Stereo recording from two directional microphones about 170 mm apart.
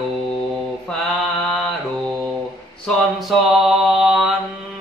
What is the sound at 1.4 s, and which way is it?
Mantra, centre (ahead or behind).